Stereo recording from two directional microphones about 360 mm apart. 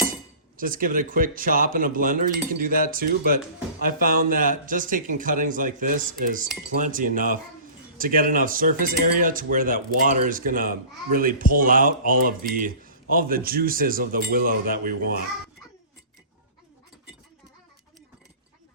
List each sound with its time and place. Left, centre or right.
0.5 s cutlery: right